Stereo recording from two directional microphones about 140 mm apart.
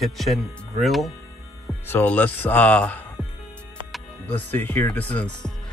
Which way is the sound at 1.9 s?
15° left (ahead or behind).